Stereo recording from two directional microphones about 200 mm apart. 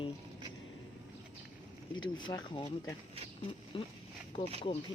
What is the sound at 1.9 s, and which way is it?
Speech, 20° left (ahead or behind).